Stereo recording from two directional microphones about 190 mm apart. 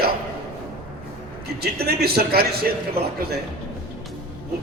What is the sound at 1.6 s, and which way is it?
Speech, 55° right (ahead or behind).